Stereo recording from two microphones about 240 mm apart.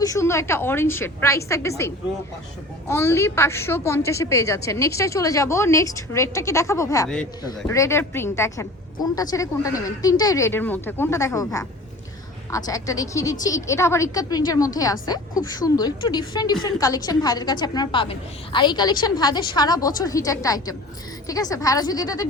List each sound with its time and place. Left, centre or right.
0.0 s a woman's voice: centre
2.9 s a woman's voice: centre